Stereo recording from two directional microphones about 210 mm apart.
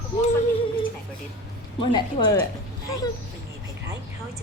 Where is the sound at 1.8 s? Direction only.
20° left (ahead or behind).